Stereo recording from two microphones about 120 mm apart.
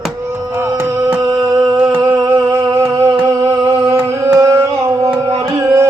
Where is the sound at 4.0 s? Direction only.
25° right (ahead or behind).